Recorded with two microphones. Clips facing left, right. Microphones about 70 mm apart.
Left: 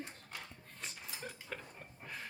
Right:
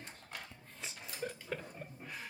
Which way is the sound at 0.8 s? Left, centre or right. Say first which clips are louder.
Right 4 dB; centre.